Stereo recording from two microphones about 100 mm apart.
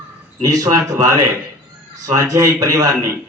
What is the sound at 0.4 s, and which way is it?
A man's voice, 35° right (ahead or behind).